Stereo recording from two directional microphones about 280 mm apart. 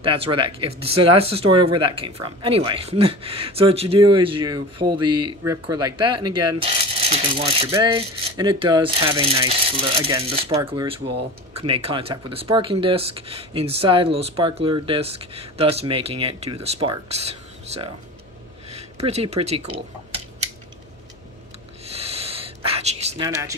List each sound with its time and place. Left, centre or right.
0.0 s speech: centre
19.0 s speech: right
21.9 s a sound: right